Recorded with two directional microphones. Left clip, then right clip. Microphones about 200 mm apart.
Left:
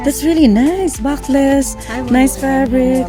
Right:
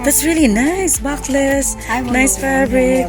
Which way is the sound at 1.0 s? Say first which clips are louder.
Left 3 dB; 25° left (ahead or behind).